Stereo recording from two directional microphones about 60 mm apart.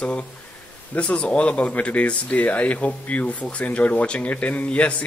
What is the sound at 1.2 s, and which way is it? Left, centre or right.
A man's voice, left.